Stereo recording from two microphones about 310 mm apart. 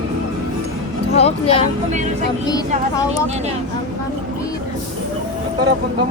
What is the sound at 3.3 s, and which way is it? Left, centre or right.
Speech, right.